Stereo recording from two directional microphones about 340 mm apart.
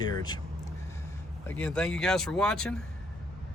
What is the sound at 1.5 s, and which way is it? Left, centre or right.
Speech, centre.